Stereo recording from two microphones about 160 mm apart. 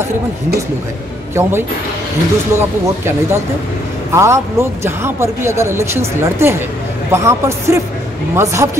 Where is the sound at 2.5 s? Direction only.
15° right (ahead or behind).